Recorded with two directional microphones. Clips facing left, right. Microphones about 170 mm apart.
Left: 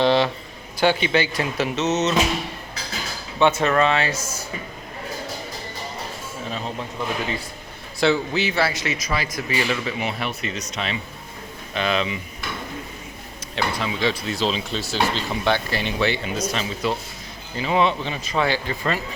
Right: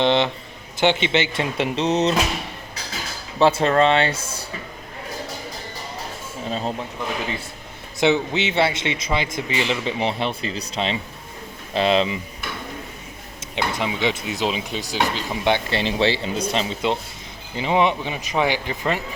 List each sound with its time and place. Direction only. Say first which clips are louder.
0.0 s speech: left 1 dB; 20° right (ahead or behind)
3.3 s speech: right 2 dB; 30° right (ahead or behind)
6.5 s speech: right 5 dB; 35° right (ahead or behind)
7.9 s speech: right 1 dB; 20° right (ahead or behind)
13.6 s speech: right 1 dB; 20° right (ahead or behind)